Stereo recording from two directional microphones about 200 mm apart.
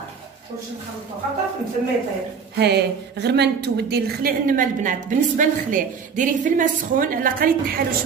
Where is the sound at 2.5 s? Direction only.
55° right (ahead or behind).